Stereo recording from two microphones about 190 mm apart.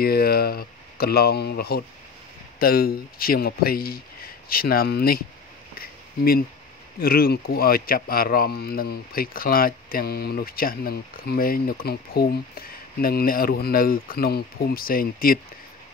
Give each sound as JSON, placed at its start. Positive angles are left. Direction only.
{"t": 0.0, "sound": "speech", "side_deg": 55}
{"t": 5.8, "sound": "a sound", "side_deg": 50}
{"t": 7.0, "sound": "speech", "side_deg": 50}